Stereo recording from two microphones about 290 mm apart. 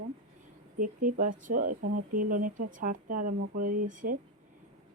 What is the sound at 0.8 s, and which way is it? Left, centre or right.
Speech, right.